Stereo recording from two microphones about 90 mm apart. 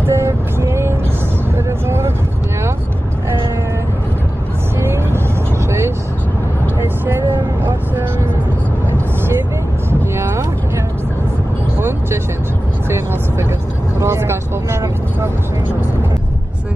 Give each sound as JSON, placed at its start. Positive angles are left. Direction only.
{"t": 0.0, "sound": "vehicle", "side_deg": -30}
{"t": 5.7, "sound": "vehicle", "side_deg": -30}
{"t": 10.1, "sound": "music", "side_deg": -30}
{"t": 14.0, "sound": "vehicle", "side_deg": -30}